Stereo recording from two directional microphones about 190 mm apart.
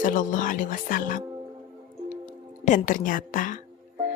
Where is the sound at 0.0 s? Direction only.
45° left (ahead or behind).